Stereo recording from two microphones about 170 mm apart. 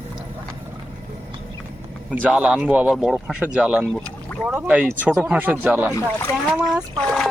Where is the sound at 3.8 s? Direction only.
5° left (ahead or behind).